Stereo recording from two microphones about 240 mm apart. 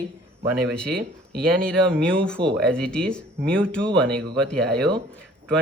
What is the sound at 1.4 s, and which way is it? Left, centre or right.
Speech, centre.